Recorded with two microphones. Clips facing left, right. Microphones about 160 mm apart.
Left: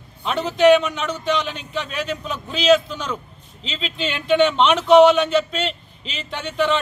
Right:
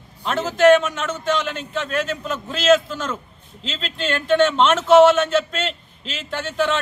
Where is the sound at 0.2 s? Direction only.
Centre (ahead or behind).